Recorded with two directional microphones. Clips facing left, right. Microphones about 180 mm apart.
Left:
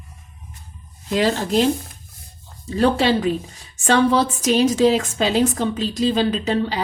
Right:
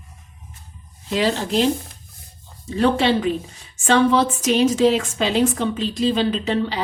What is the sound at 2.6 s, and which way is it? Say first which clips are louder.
A woman's voice: even; 40° left (ahead or behind).